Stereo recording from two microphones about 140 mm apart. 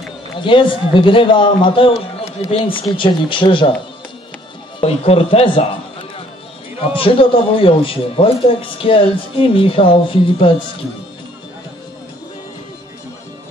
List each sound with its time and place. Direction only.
0.4 s speech: 35° left (ahead or behind)
4.7 s a man's voice: 45° left (ahead or behind)
6.8 s speech: 40° left (ahead or behind)